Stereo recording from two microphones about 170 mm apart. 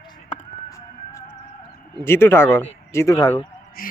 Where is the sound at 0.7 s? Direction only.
15° left (ahead or behind).